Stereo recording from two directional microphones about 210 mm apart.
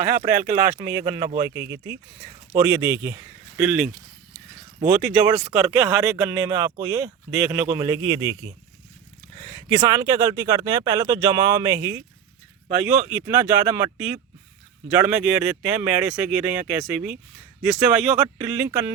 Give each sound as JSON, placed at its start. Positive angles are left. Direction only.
{"t": 0.0, "sound": "speech", "side_deg": -40}
{"t": 0.8, "sound": "speech", "side_deg": -15}
{"t": 4.9, "sound": "speech", "side_deg": -5}
{"t": 9.5, "sound": "speech", "side_deg": -15}